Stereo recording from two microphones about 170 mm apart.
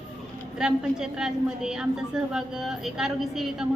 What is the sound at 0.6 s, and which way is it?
A woman's voice, 5° right (ahead or behind).